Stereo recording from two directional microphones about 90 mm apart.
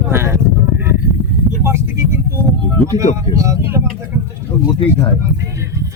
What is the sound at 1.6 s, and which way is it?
Speech, 30° right (ahead or behind).